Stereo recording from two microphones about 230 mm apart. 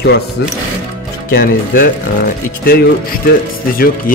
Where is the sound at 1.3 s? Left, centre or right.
Left.